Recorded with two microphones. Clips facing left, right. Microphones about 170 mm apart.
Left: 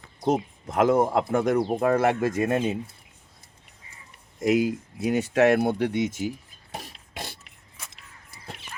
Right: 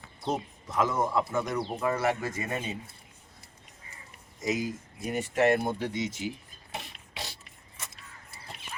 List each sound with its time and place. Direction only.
0.7 s speech: 55° left (ahead or behind)
4.4 s speech: 60° left (ahead or behind)
6.7 s beatboxing: 40° left (ahead or behind)